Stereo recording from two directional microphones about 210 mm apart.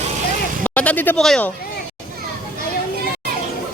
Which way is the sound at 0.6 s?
10° left (ahead or behind).